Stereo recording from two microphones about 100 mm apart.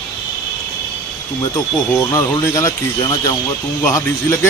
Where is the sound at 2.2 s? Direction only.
30° left (ahead or behind).